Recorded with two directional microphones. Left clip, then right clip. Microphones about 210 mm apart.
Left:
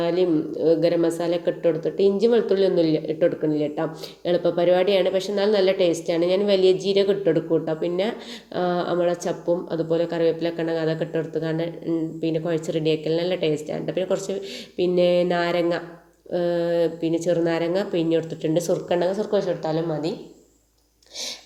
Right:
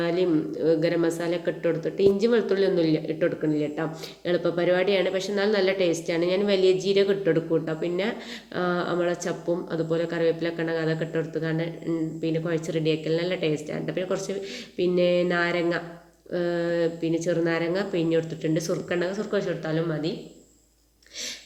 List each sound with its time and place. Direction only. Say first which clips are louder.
0.0 s speech: left 3 dB; 10° left (ahead or behind)